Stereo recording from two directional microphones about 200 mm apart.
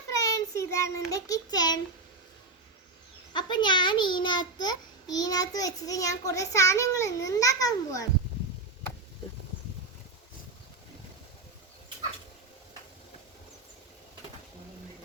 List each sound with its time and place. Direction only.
0.1 s child singing: 15° left (ahead or behind)
3.3 s a child's voice: 20° left (ahead or behind)